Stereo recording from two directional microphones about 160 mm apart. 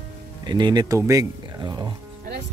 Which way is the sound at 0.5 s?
25° right (ahead or behind).